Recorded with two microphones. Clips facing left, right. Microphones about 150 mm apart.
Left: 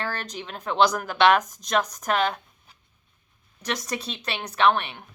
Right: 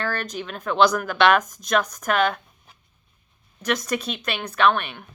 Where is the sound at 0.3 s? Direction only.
25° left (ahead or behind).